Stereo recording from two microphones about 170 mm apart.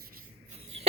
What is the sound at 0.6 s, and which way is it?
Cough, 40° right (ahead or behind).